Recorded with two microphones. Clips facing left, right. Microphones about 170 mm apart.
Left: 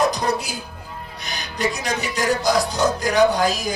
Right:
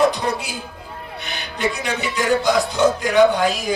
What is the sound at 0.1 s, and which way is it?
Music, 40° left (ahead or behind).